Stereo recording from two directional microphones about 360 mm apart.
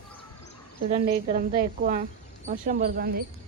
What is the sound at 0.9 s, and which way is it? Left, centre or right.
Speech, right.